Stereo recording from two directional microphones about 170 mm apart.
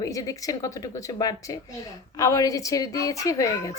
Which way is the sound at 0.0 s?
20° left (ahead or behind).